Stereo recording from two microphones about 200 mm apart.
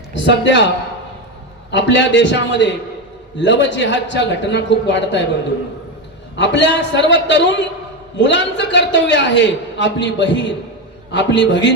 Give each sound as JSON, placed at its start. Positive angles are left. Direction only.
{"t": 0.1, "sound": "a man's voice", "side_deg": 60}
{"t": 1.7, "sound": "a man's voice", "side_deg": 60}
{"t": 6.3, "sound": "a man's voice", "side_deg": 60}